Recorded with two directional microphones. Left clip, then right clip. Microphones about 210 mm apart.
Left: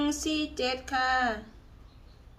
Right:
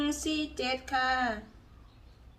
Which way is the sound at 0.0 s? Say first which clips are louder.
Left 2 dB; 5° left (ahead or behind).